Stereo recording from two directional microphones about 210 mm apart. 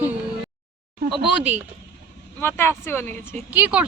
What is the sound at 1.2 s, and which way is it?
Speech, 5° right (ahead or behind).